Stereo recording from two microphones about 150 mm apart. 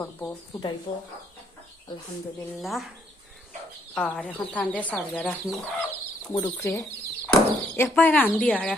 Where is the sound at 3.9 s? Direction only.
5° left (ahead or behind).